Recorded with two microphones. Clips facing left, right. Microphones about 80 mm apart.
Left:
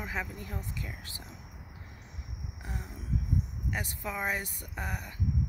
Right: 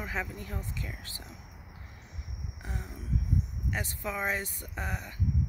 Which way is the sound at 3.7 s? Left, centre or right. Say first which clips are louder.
Right 1 dB; centre.